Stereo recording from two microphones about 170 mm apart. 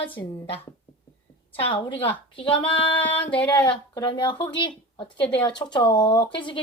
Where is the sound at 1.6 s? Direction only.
30° left (ahead or behind).